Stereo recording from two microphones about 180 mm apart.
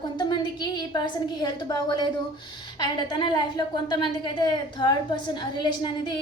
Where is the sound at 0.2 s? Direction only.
25° left (ahead or behind).